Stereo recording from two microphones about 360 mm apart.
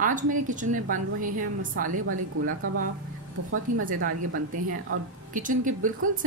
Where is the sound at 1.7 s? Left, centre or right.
Right.